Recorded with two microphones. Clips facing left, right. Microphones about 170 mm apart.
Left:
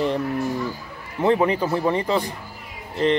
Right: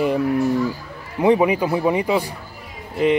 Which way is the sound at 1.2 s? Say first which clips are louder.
Right 3 dB; 10° right (ahead or behind).